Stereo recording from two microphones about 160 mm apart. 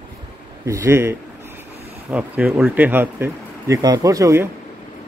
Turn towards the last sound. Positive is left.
turn(degrees=-20)  # may be behind; listen again after turning